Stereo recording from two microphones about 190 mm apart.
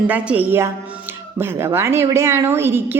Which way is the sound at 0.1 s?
10° right (ahead or behind).